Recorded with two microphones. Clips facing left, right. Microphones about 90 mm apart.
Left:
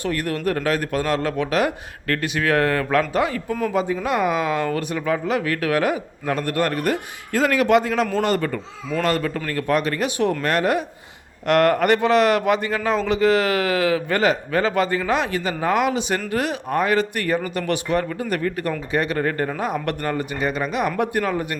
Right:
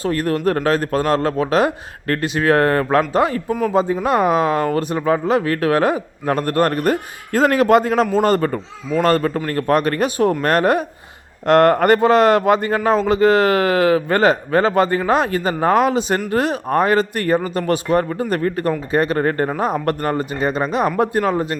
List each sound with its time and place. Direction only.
0.0 s a woman's voice: 35° right (ahead or behind)